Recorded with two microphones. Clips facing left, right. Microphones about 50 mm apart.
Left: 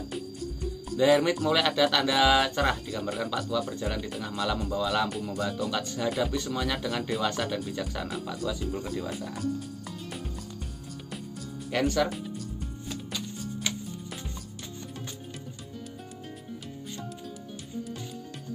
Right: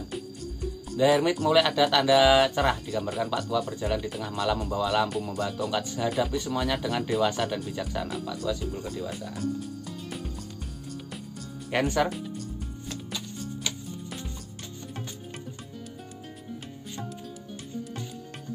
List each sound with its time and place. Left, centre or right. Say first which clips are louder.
0.9 s speech: even; centre
11.7 s speech: right 1 dB; right
12.9 s music: left 1 dB; centre